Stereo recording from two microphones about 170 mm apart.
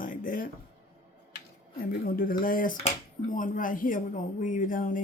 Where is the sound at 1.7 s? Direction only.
60° left (ahead or behind).